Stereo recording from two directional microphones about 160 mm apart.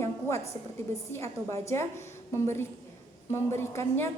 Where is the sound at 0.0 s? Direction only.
15° left (ahead or behind).